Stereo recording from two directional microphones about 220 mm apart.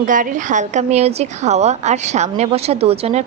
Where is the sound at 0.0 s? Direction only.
35° right (ahead or behind).